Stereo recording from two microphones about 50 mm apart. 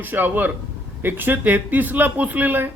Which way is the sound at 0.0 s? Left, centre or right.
Right.